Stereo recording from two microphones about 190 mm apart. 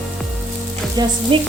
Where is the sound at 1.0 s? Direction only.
20° right (ahead or behind).